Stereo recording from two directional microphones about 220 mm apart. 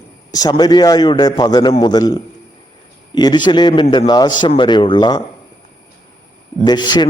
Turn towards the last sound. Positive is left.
turn(degrees=20)  # may be behind; listen again after turning